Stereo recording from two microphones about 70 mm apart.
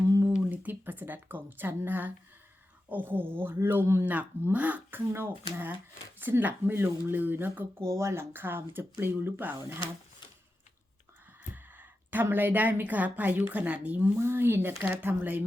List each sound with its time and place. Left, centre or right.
0.3 s a woman's voice: right
4.0 s speech: right
7.9 s speech: right
11.5 s a woman's voice: right
14.2 s speech: right